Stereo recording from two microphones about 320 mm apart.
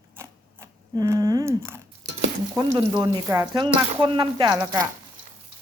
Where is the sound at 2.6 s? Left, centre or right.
Centre.